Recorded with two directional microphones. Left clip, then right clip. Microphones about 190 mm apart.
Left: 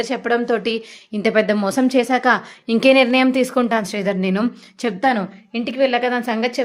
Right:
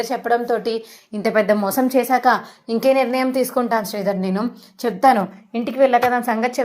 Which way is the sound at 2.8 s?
55° left (ahead or behind).